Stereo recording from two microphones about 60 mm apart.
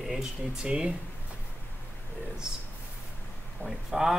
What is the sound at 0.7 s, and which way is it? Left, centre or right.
Speech, centre.